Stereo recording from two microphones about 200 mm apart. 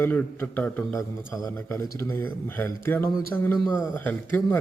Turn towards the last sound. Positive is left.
turn(degrees=10)  # may be behind; listen again after turning